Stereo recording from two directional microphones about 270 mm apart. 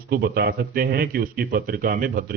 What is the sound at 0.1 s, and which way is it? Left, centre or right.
Speech, right.